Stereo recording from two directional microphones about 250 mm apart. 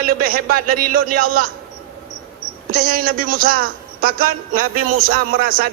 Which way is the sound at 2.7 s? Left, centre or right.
Right.